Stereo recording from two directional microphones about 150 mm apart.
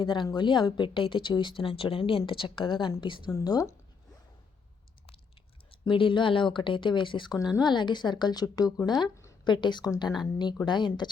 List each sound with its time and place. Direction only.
0.0 s speech: 30° left (ahead or behind)
5.8 s speech: 35° left (ahead or behind)